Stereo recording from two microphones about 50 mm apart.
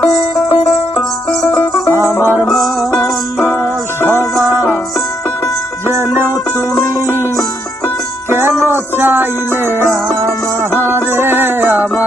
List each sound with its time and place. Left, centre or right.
0.6 s music: centre
3.6 s music: left
5.9 s music: right
8.3 s music: right
9.6 s music: right